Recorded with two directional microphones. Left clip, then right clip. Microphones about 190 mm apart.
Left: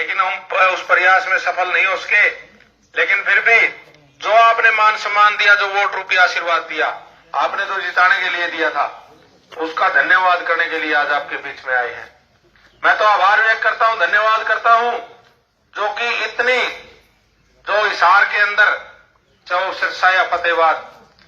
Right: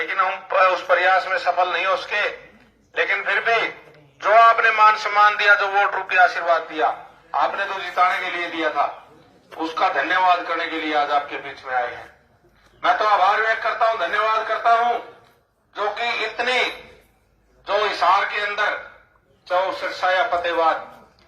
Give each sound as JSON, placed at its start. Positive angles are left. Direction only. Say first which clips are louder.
{"t": 0.0, "sound": "a man's voice", "louder": "left 3 dB", "side_deg": -30}
{"t": 17.7, "sound": "a man's voice", "louder": "left 5 dB", "side_deg": -20}